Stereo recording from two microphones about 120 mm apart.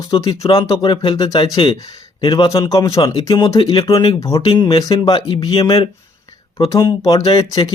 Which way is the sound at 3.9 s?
35° left (ahead or behind).